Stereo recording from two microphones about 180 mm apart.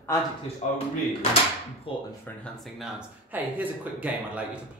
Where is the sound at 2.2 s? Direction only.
5° left (ahead or behind).